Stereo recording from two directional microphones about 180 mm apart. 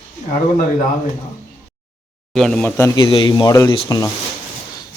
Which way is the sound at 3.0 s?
30° left (ahead or behind).